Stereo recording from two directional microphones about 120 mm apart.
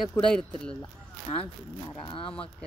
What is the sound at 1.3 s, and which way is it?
Speech, 50° left (ahead or behind).